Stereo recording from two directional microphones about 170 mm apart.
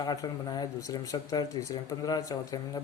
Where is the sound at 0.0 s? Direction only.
25° left (ahead or behind).